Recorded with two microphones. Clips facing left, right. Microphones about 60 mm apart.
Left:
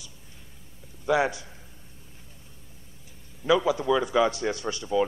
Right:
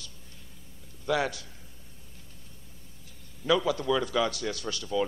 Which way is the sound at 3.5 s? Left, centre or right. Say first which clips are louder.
Left 3 dB; centre.